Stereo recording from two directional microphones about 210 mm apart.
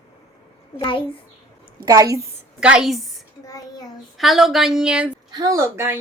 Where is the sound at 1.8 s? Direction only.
15° right (ahead or behind).